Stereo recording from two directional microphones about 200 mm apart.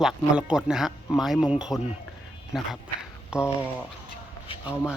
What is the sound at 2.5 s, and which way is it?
Speech, centre (ahead or behind).